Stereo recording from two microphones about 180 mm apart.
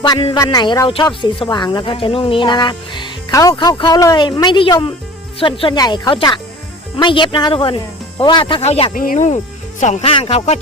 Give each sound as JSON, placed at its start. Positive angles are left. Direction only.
{"t": 0.0, "sound": "speech", "side_deg": 25}
{"t": 9.0, "sound": "speech", "side_deg": 45}